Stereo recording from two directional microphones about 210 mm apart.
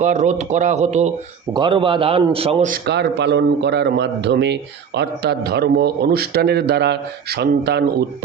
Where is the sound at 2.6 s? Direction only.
50° right (ahead or behind).